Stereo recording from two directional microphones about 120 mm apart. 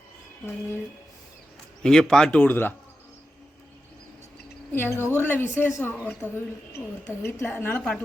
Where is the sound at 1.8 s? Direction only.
5° left (ahead or behind).